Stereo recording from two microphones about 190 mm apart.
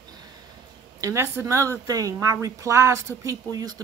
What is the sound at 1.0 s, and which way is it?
A woman's voice, 15° right (ahead or behind).